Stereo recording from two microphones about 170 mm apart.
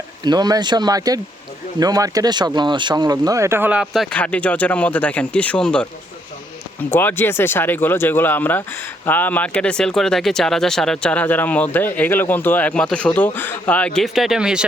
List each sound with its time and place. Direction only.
0.3 s speech: 25° right (ahead or behind); by 5.9 s 5° left (ahead or behind)
6.9 s speech: 10° left (ahead or behind); by 14.7 s 5° right (ahead or behind)